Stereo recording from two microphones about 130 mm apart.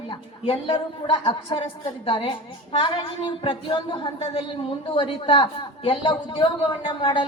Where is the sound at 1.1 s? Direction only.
45° left (ahead or behind).